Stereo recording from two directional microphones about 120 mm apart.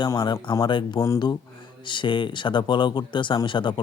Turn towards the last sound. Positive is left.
turn(degrees=40)  # may be behind; listen again after turning